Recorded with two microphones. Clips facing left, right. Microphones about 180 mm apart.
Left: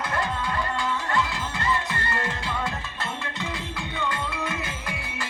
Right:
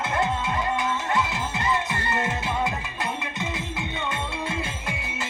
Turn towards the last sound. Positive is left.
turn(degrees=-25)  # may be behind; listen again after turning